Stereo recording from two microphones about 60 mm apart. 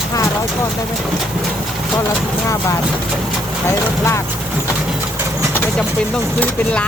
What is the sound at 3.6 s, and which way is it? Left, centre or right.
Speech, left.